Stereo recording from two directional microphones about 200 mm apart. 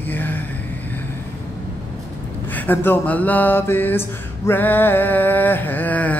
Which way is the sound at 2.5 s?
10° left (ahead or behind).